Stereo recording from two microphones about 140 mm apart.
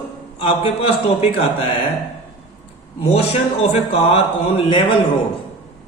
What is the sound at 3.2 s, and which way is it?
Speech, 50° left (ahead or behind).